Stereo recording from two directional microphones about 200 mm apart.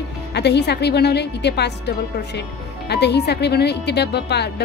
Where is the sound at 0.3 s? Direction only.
55° left (ahead or behind).